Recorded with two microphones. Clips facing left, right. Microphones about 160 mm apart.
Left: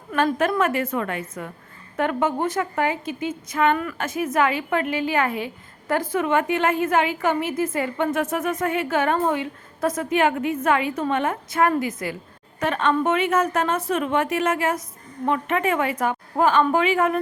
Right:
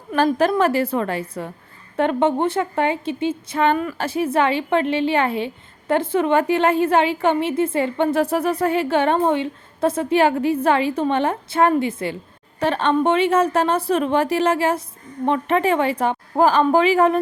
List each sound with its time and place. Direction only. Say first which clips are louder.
0.3 s a woman's voice: right 4 dB; 35° right (ahead or behind)